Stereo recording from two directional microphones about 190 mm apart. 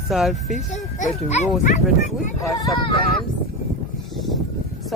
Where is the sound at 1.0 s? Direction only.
35° left (ahead or behind).